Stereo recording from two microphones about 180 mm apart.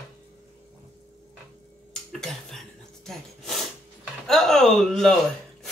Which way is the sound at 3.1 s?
Centre (ahead or behind).